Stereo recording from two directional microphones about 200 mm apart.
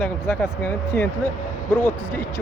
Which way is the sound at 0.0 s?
10° left (ahead or behind).